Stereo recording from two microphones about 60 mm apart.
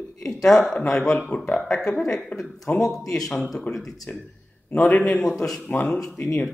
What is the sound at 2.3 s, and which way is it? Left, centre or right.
Speech, left.